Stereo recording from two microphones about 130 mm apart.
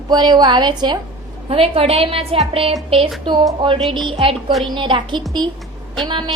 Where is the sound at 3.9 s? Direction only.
40° right (ahead or behind).